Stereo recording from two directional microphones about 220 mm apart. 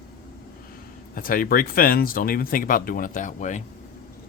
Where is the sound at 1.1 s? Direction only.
40° left (ahead or behind).